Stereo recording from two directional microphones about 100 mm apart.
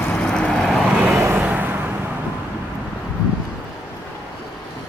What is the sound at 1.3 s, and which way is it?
Vehicle, 15° right (ahead or behind).